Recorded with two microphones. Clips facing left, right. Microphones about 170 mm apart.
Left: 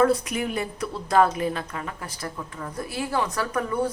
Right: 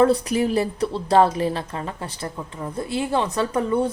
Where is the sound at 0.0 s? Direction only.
30° right (ahead or behind).